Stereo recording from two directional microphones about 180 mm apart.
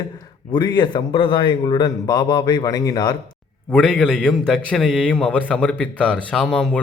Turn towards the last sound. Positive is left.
turn(degrees=5)  # may be behind; listen again after turning